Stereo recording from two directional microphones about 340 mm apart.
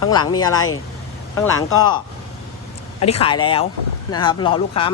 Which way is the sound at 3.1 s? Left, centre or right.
Centre.